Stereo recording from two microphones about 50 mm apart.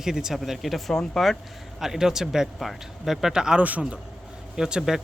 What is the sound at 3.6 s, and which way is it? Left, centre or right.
Speech, right.